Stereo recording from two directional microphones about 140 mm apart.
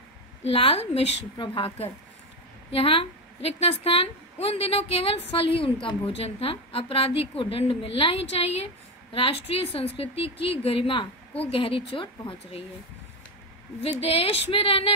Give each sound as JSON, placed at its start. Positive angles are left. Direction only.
{"t": 0.4, "sound": "a woman's voice", "side_deg": 45}
{"t": 13.8, "sound": "a woman's voice", "side_deg": 45}